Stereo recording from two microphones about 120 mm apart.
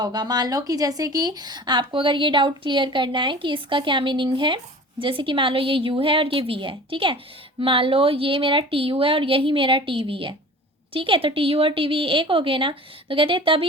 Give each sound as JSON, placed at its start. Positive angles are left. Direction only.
{"t": 0.0, "sound": "speech", "side_deg": -35}